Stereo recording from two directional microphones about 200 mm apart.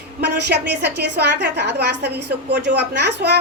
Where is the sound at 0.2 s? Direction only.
55° right (ahead or behind).